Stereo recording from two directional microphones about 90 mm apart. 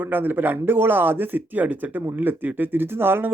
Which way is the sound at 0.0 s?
20° right (ahead or behind).